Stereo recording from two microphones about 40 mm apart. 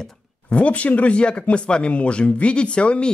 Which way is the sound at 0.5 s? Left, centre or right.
Left.